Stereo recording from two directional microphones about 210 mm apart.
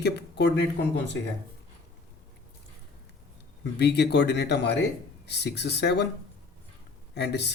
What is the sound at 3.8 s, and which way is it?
Speech, 55° left (ahead or behind).